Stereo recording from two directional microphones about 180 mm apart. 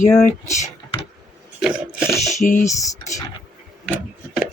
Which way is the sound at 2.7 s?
15° left (ahead or behind).